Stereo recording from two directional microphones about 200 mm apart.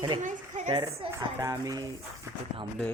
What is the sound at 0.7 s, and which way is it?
Speech, 20° right (ahead or behind).